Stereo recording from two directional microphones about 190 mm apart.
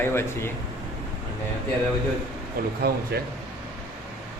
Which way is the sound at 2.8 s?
55° right (ahead or behind).